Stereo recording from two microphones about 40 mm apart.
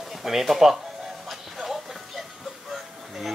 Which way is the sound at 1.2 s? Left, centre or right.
Centre.